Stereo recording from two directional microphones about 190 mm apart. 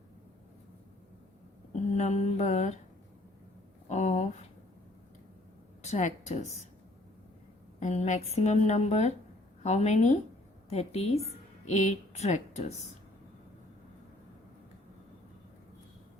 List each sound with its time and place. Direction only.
2.0 s a woman's voice: 40° left (ahead or behind)
3.8 s a sound: 35° left (ahead or behind)
5.8 s a woman's voice: 40° left (ahead or behind)
7.8 s a woman's voice: 40° left (ahead or behind)